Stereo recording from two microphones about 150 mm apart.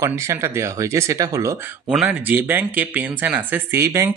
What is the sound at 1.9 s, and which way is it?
Speech, 10° right (ahead or behind).